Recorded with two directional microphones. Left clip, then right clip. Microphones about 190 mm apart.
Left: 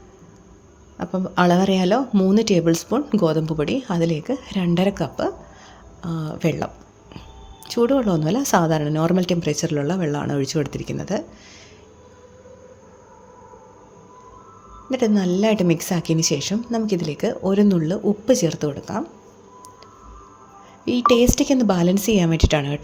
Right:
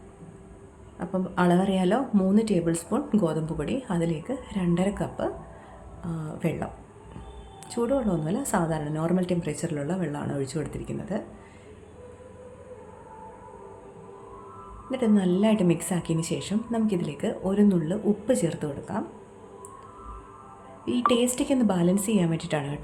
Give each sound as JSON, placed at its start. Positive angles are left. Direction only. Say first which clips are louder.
{"t": 0.9, "sound": "speech", "louder": "left 6 dB", "side_deg": 35}
{"t": 7.7, "sound": "speech", "louder": "left 7 dB", "side_deg": 35}
{"t": 14.8, "sound": "speech", "louder": "left 5 dB", "side_deg": 35}
{"t": 21.1, "sound": "speech", "louder": "left 8 dB", "side_deg": 30}